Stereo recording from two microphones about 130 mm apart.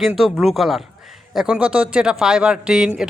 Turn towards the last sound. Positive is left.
turn(degrees=-5)  # may be behind; listen again after turning